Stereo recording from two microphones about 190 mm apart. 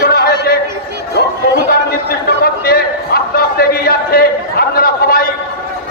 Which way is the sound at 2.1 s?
55° left (ahead or behind).